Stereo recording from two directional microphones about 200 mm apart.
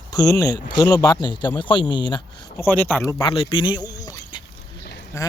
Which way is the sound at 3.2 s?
25° left (ahead or behind).